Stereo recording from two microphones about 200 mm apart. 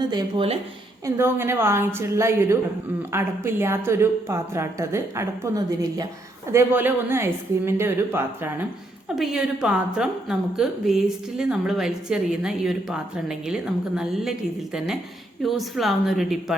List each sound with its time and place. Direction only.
0.0 s speech: 20° right (ahead or behind)
1.0 s a woman's voice: 10° right (ahead or behind)